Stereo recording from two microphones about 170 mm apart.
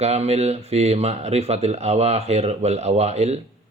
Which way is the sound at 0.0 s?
40° right (ahead or behind).